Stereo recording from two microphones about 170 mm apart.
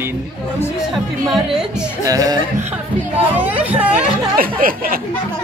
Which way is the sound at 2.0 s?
20° right (ahead or behind).